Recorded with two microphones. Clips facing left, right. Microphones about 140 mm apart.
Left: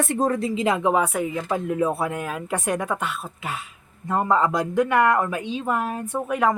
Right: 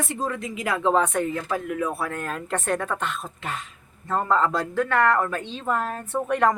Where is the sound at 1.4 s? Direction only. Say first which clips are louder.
Left 3 dB; 20° left (ahead or behind).